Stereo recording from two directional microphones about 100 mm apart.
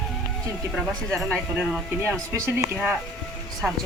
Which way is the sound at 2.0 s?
30° right (ahead or behind).